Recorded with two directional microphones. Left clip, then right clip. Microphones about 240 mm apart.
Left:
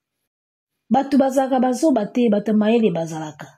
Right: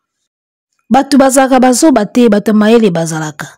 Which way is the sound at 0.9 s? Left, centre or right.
Right.